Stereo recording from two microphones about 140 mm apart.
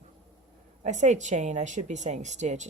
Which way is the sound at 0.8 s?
60° right (ahead or behind).